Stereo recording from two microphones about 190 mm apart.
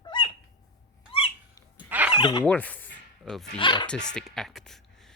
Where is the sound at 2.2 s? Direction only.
25° left (ahead or behind).